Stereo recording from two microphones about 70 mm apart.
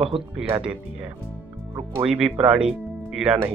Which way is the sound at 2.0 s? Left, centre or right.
Centre.